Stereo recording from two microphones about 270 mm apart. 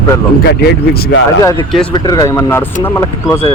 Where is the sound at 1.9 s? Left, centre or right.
Centre.